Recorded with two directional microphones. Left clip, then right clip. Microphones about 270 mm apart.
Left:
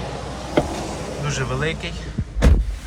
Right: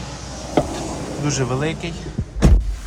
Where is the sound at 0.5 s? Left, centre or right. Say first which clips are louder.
Right 1 dB; right.